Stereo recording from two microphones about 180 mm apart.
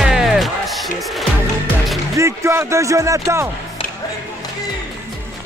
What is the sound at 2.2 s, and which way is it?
Speech, 15° right (ahead or behind).